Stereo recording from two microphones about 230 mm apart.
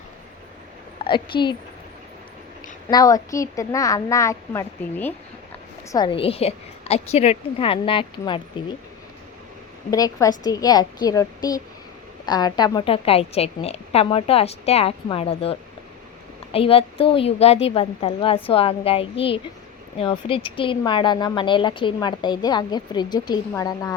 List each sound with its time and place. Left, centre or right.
0.9 s a woman's voice: left
2.9 s speech: centre
5.9 s speech: left
9.9 s speech: centre